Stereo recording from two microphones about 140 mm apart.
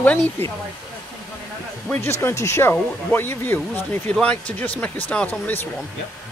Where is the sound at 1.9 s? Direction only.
15° left (ahead or behind).